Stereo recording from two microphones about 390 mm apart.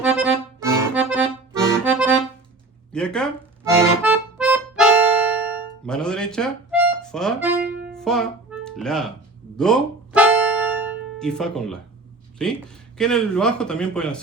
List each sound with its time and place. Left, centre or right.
0.0 s accordion: centre
7.9 s music: centre
13.0 s a man's voice: centre